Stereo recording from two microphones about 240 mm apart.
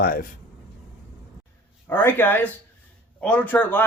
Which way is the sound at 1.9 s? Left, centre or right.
Centre.